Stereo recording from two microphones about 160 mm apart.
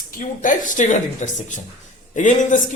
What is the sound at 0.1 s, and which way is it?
Speech, 55° left (ahead or behind).